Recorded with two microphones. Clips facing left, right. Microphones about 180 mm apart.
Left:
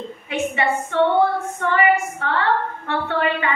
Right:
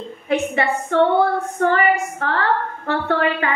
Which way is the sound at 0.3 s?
35° right (ahead or behind).